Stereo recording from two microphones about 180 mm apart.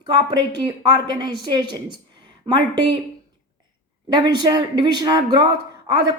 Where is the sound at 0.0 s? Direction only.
25° right (ahead or behind).